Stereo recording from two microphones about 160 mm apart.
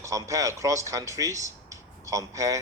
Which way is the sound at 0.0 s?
20° right (ahead or behind).